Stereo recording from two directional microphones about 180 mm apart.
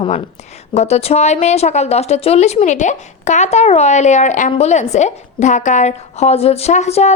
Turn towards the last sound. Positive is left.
turn(degrees=40)  # may be behind; listen again after turning